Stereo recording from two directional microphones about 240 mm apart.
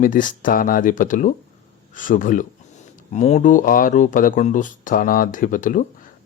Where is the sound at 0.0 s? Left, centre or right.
Left.